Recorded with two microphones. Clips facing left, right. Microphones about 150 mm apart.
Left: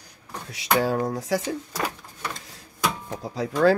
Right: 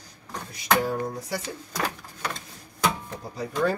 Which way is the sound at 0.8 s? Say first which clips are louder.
Left 4 dB; 90° left.